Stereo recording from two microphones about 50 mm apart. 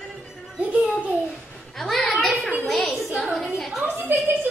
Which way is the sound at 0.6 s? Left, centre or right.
Right.